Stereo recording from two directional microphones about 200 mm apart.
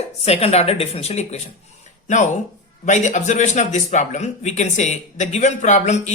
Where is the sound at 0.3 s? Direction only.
30° left (ahead or behind).